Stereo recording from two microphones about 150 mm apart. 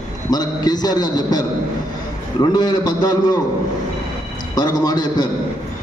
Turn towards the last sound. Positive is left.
turn(degrees=25)  # may be behind; listen again after turning